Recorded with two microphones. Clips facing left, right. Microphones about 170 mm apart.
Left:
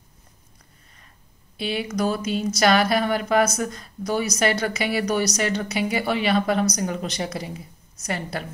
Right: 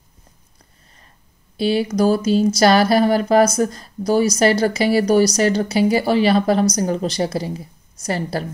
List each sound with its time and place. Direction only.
1.6 s speech: 35° right (ahead or behind)